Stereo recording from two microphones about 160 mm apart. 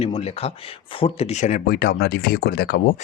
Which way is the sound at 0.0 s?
40° left (ahead or behind).